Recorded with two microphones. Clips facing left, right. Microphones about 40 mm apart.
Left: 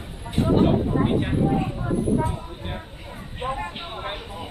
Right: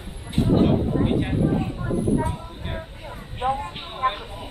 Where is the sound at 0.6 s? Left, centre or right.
Centre.